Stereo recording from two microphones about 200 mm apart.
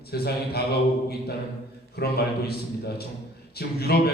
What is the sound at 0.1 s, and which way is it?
Speech, 50° left (ahead or behind).